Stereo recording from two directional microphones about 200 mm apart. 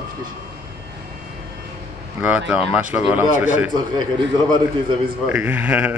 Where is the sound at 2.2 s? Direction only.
5° right (ahead or behind).